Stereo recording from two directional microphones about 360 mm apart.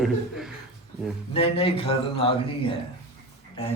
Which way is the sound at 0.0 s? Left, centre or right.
Centre.